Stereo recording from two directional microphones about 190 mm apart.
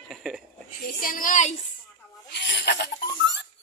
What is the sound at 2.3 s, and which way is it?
Snake, 65° left (ahead or behind).